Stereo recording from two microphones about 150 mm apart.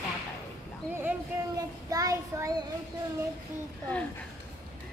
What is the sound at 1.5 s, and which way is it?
A child's voice, 25° right (ahead or behind).